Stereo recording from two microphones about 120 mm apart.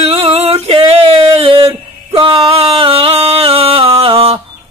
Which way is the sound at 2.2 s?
45° right (ahead or behind).